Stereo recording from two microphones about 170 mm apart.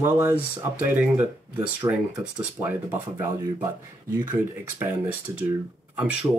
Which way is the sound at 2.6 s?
10° right (ahead or behind).